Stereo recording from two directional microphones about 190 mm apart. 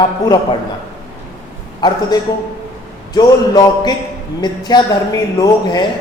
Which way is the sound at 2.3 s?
20° left (ahead or behind).